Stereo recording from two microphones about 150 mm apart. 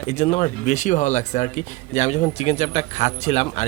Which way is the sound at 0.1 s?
45° left (ahead or behind).